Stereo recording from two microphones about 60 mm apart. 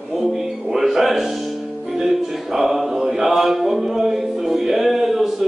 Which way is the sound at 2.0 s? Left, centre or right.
Centre.